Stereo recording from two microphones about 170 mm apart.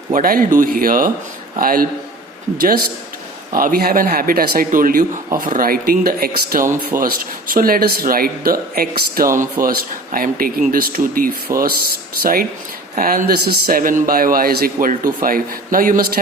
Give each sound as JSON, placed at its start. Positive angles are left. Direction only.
{"t": 0.1, "sound": "speech", "side_deg": -55}